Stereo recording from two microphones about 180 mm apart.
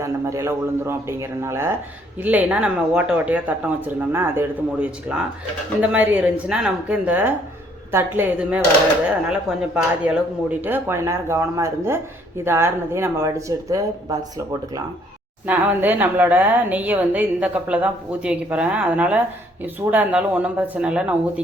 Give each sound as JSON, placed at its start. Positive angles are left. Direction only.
{"t": 0.0, "sound": "speech", "side_deg": -15}
{"t": 9.7, "sound": "speech", "side_deg": -5}